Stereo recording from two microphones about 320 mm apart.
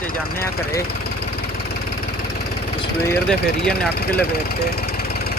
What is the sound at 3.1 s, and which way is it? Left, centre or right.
Speech, centre.